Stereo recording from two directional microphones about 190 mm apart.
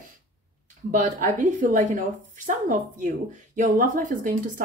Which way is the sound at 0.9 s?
45° right (ahead or behind).